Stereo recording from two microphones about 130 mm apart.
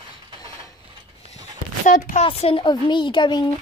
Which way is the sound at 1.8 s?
80° left.